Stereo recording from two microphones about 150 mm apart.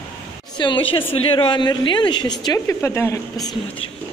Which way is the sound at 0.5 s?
30° left (ahead or behind).